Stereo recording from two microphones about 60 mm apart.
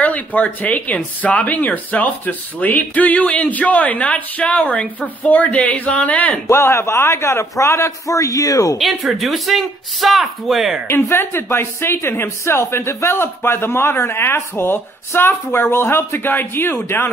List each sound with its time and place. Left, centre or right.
0.0 s speech: left
6.5 s a man's voice: left
8.7 s speech: centre
10.9 s speech: left